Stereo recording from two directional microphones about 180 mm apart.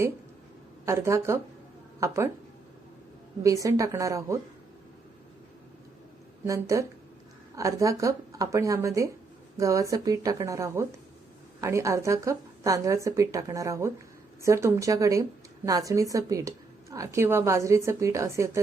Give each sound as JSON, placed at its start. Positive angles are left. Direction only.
{"t": 0.9, "sound": "a woman's voice", "side_deg": -15}
{"t": 3.4, "sound": "a woman's voice", "side_deg": -20}
{"t": 6.4, "sound": "a woman's voice", "side_deg": -15}